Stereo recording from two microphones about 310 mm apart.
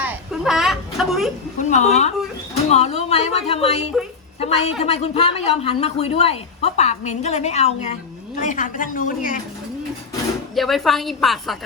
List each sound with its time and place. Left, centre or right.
0.0 s a sound: centre
1.5 s a woman's voice: left
10.5 s a woman's voice: centre